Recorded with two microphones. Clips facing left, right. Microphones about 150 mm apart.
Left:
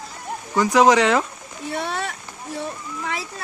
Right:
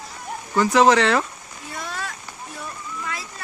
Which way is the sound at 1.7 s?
70° left (ahead or behind).